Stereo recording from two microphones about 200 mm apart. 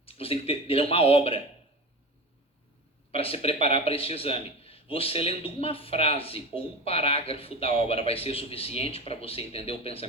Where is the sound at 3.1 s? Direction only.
30° left (ahead or behind).